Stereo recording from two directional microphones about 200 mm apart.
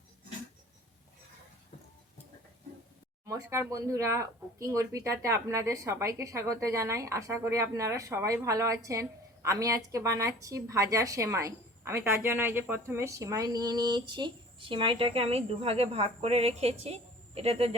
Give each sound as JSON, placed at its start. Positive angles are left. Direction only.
{"t": 3.2, "sound": "speech", "side_deg": -15}